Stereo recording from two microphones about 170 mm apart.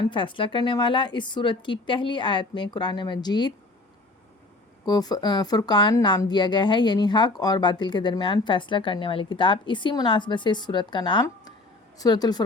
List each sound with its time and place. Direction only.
0.0 s a woman's voice: 30° left (ahead or behind)
4.9 s a woman's voice: 25° left (ahead or behind)